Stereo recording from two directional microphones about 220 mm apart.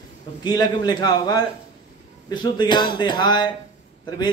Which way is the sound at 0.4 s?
20° left (ahead or behind).